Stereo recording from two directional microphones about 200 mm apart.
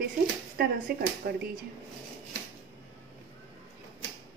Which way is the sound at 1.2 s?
50° right (ahead or behind).